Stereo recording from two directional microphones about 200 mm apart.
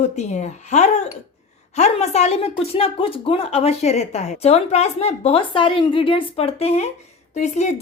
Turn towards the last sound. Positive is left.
turn(degrees=35)  # may be behind; listen again after turning